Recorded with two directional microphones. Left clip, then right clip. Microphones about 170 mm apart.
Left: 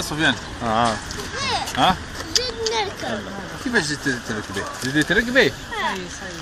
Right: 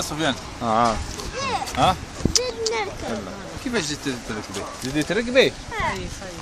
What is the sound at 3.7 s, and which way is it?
Speech, 25° right (ahead or behind).